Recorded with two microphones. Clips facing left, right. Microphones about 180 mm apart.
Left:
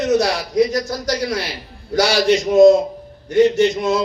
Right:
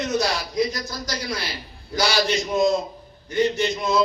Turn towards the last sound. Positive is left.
turn(degrees=80)